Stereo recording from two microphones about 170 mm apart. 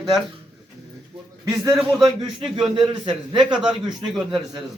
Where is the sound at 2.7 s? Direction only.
25° right (ahead or behind).